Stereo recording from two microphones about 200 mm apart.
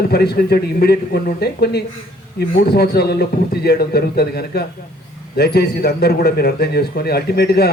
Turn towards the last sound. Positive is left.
turn(degrees=55)  # may be behind; listen again after turning